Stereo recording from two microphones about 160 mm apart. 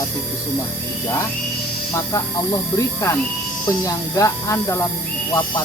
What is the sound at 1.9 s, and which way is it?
Speech, 20° left (ahead or behind).